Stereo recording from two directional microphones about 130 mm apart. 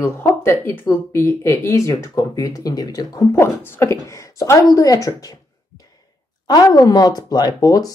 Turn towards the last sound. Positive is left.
turn(degrees=30)  # may be behind; listen again after turning